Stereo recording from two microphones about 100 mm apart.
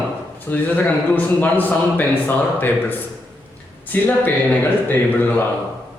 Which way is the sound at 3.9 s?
20° left (ahead or behind).